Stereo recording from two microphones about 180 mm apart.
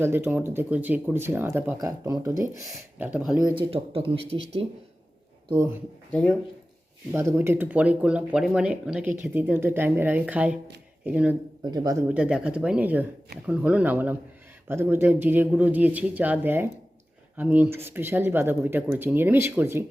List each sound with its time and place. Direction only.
0.0 s speech: 10° right (ahead or behind)
3.6 s speech: 30° right (ahead or behind)
6.1 s speech: 5° left (ahead or behind)
7.1 s speech: 15° right (ahead or behind)
11.6 s speech: 25° right (ahead or behind)
12.0 s speech: 5° right (ahead or behind)